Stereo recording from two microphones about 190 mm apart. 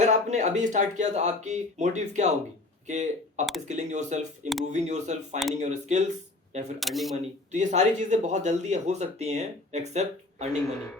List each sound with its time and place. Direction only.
0.0 s speech: 40° right (ahead or behind)
6.7 s speech: centre (ahead or behind)
7.5 s speech: 40° right (ahead or behind)